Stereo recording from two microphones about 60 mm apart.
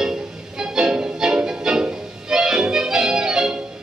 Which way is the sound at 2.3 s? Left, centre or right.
Centre.